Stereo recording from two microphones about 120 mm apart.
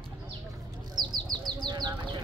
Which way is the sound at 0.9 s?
35° right (ahead or behind).